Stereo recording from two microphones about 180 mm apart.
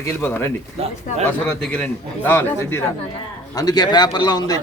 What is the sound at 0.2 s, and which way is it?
A man's voice, 15° left (ahead or behind).